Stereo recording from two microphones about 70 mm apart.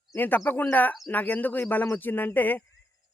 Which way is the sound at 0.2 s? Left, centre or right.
Left.